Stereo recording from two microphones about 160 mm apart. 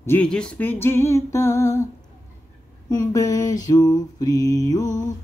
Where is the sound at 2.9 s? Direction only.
20° left (ahead or behind).